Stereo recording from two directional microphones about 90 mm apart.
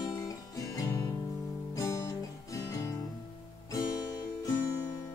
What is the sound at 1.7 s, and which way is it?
Music, 40° left (ahead or behind).